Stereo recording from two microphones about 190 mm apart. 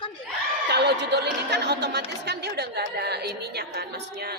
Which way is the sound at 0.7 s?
60° right (ahead or behind).